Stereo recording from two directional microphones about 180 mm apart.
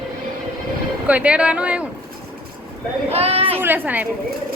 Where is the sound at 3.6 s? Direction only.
10° right (ahead or behind).